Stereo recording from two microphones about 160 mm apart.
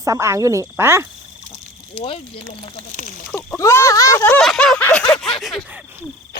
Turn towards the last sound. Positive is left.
turn(degrees=0)  # may be behind; listen again after turning